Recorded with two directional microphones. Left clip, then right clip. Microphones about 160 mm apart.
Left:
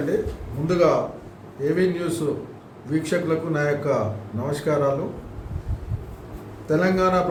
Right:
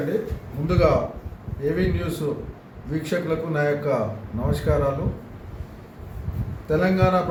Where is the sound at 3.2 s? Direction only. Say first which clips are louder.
Even; 10° left (ahead or behind).